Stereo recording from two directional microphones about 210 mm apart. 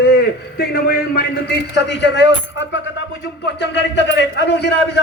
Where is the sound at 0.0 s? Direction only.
50° left (ahead or behind).